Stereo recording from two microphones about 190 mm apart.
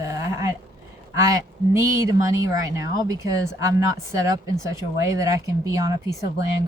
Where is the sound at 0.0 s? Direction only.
15° right (ahead or behind).